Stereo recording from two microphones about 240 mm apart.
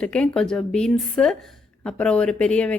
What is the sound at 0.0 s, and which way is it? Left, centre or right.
A woman's voice, centre.